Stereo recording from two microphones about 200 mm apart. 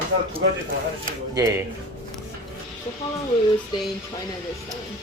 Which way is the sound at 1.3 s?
15° right (ahead or behind).